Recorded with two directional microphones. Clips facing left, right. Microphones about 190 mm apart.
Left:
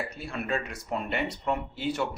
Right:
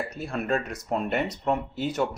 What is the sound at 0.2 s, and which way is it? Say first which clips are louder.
Speech: right 6 dB; 45° right (ahead or behind).